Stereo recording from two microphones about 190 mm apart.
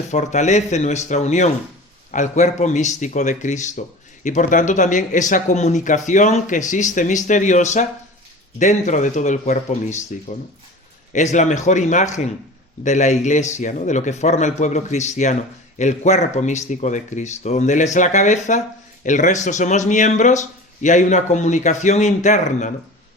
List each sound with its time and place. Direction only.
0.1 s speech: 40° left (ahead or behind)